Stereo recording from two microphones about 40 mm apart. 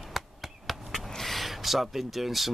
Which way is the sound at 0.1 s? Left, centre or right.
Centre.